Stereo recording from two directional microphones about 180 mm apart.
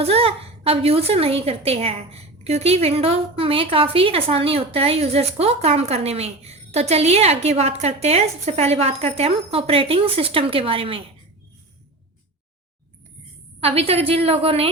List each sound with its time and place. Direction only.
0.0 s a woman's voice: 35° right (ahead or behind)
13.6 s a woman's voice: 35° right (ahead or behind)